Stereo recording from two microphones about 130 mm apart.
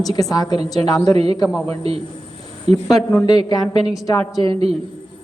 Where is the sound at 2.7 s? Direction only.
Centre (ahead or behind).